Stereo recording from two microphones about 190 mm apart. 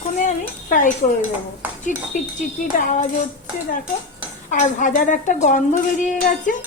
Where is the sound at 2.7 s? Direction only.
45° left (ahead or behind).